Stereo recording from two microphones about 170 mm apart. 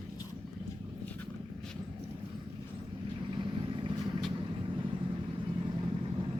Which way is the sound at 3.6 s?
30° right (ahead or behind).